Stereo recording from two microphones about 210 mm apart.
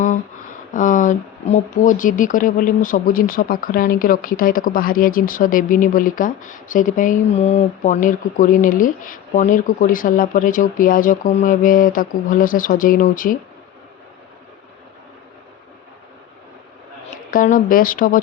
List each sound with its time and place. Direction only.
0.7 s speech: 40° left (ahead or behind)
17.3 s speech: 40° left (ahead or behind)